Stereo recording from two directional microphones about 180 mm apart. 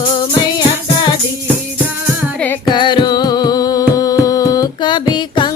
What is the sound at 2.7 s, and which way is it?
Music, 25° left (ahead or behind).